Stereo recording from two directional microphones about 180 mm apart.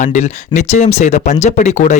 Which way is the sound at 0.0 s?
40° left (ahead or behind).